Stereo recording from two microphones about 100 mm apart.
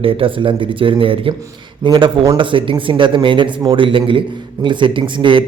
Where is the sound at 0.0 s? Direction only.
65° right (ahead or behind).